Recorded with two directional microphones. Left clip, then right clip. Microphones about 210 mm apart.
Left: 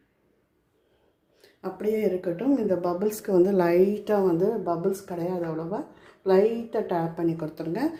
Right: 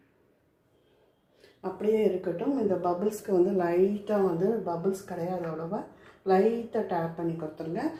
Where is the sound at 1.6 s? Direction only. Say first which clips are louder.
Even; 25° left (ahead or behind).